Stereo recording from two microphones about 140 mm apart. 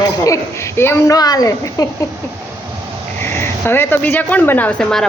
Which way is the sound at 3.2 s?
15° left (ahead or behind).